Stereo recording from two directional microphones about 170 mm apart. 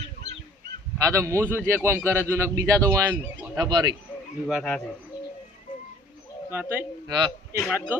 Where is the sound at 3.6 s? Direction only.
25° right (ahead or behind).